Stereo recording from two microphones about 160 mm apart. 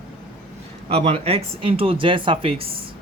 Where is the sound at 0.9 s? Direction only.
40° right (ahead or behind).